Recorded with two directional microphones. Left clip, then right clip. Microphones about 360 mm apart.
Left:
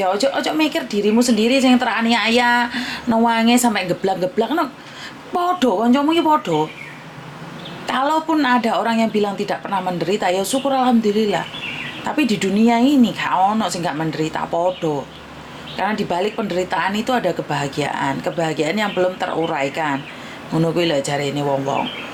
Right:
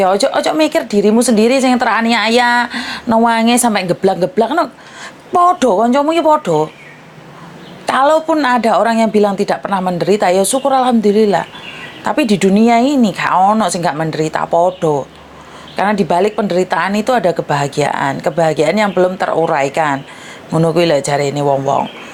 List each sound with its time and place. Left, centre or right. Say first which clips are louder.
0.0 s speech: right 6 dB; right
7.9 s speech: right 7 dB; right